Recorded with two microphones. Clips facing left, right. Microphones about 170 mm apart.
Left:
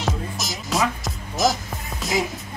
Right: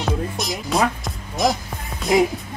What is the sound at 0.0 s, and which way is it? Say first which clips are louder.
Music: right 3 dB; centre (ahead or behind).